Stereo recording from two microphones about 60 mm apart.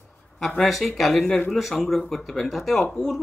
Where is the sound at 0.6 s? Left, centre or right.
Centre.